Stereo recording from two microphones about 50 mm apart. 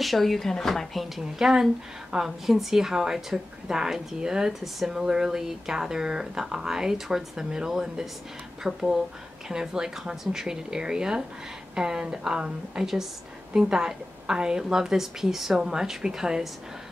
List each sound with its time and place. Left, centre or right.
0.0 s a woman's voice: centre